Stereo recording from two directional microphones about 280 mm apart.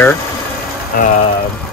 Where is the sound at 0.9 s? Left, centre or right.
Left.